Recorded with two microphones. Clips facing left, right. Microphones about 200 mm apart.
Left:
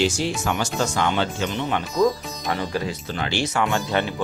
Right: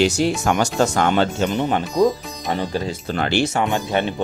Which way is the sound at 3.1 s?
55° right (ahead or behind).